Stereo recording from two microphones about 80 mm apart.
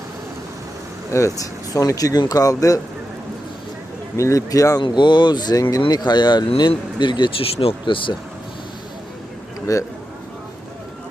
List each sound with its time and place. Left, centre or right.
1.1 s speech: left
4.2 s speech: left
4.8 s speech: left
9.6 s a sound: left